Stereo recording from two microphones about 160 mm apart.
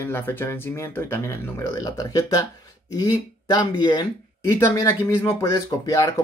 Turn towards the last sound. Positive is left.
turn(degrees=25)  # may be behind; listen again after turning